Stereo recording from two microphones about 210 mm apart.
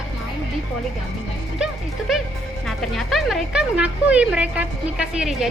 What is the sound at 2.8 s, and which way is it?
A woman's voice, centre (ahead or behind).